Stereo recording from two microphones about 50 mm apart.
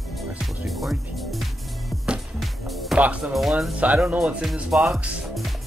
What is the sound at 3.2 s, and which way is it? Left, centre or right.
Speech, centre.